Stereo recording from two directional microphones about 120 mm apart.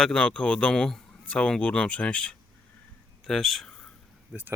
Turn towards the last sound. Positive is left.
turn(degrees=-15)  # may be behind; listen again after turning